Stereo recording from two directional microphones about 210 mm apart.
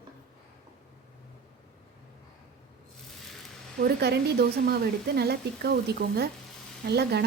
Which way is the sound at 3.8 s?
50° right (ahead or behind).